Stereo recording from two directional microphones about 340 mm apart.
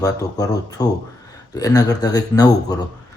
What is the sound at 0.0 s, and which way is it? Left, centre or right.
Speech, centre.